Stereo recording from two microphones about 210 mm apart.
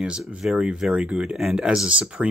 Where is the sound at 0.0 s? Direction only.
5° right (ahead or behind).